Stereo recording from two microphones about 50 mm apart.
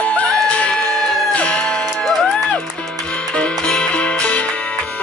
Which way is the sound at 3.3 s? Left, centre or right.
Centre.